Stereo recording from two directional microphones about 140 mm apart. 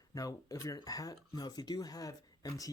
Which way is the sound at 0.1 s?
25° left (ahead or behind).